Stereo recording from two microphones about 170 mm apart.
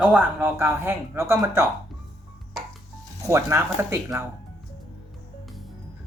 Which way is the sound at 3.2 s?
20° right (ahead or behind).